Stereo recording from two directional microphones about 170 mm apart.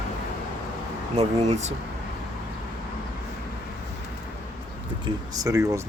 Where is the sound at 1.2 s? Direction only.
40° right (ahead or behind).